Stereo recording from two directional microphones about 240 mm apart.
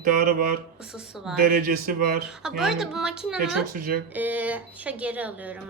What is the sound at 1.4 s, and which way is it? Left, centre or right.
Speech, right.